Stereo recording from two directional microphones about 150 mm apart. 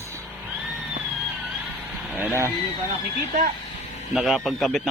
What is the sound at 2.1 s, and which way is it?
Speech, 15° right (ahead or behind).